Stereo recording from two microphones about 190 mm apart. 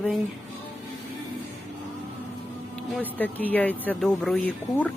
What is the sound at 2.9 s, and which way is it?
Speech, 10° left (ahead or behind).